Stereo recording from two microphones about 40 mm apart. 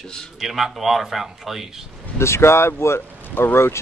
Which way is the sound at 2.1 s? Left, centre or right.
Left.